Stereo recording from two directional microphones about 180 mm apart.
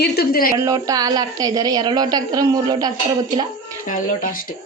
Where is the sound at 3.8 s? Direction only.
50° left (ahead or behind).